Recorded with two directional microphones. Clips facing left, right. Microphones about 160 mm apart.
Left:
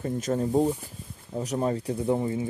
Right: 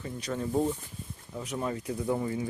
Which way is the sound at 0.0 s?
45° left (ahead or behind).